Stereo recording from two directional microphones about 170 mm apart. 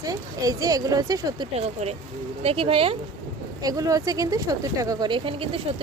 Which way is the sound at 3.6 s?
20° right (ahead or behind).